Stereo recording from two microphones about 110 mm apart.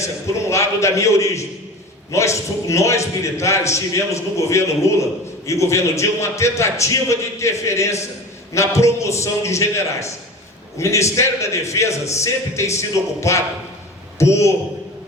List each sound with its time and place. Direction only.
0.4 s a man's voice: 25° left (ahead or behind)